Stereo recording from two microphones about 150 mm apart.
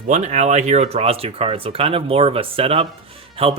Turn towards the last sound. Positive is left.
turn(degrees=-40)  # may be behind; listen again after turning